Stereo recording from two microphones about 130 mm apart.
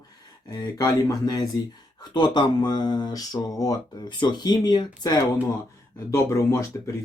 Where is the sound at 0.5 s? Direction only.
30° left (ahead or behind).